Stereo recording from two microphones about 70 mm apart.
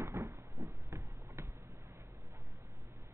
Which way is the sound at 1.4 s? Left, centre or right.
Right.